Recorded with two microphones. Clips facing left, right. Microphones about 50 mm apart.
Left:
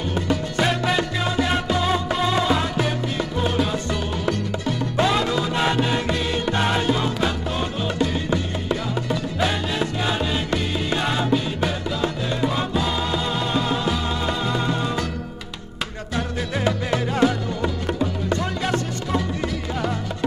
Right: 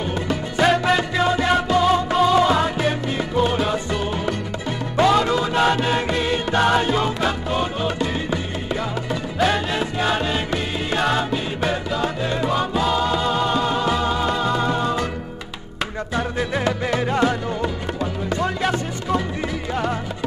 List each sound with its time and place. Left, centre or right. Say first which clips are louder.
0.1 s music: even; centre
16.2 s music: right 2 dB; centre